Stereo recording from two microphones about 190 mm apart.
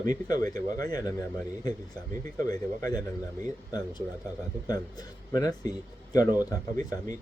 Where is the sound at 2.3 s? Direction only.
15° left (ahead or behind).